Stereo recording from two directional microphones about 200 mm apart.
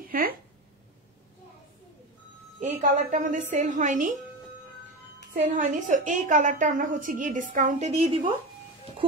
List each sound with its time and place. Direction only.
0.0 s a sound: 45° right (ahead or behind)
2.6 s a woman's voice: 40° right (ahead or behind)
5.4 s a woman's voice: 40° right (ahead or behind)